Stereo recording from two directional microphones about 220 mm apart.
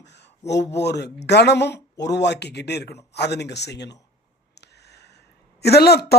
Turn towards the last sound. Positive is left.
turn(degrees=45)  # may be behind; listen again after turning